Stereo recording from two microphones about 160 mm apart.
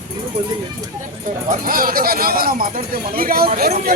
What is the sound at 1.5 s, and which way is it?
Speech, 60° right (ahead or behind).